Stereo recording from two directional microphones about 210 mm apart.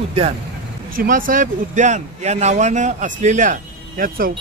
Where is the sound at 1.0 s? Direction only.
40° right (ahead or behind).